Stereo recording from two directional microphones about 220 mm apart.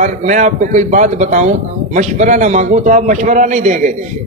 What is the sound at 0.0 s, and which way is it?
A man's voice, 35° right (ahead or behind).